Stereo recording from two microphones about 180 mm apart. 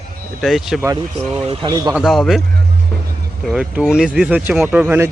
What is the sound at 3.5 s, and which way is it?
Speech, 5° right (ahead or behind).